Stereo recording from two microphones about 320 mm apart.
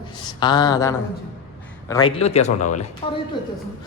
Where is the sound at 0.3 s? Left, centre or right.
Centre.